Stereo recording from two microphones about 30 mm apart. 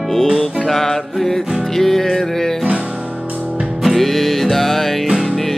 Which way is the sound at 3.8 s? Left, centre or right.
Centre.